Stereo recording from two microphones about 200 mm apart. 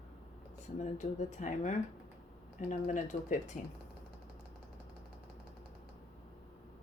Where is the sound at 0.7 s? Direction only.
35° left (ahead or behind).